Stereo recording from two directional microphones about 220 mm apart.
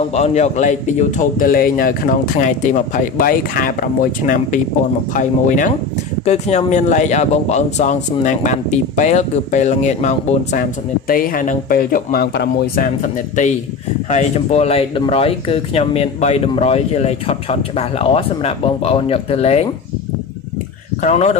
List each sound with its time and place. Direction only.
0.1 s a man's voice: 30° left (ahead or behind)
21.0 s a man's voice: 30° left (ahead or behind)